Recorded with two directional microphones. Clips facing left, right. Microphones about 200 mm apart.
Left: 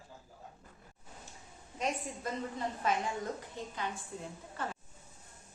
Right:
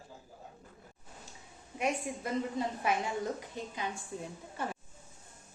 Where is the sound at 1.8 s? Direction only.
10° right (ahead or behind).